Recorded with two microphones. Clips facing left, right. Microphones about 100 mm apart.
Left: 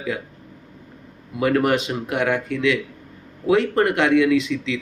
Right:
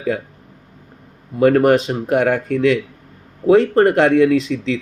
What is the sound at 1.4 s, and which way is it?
Speech, 40° right (ahead or behind).